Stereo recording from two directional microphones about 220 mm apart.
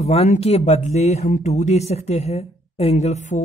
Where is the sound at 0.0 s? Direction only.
30° left (ahead or behind).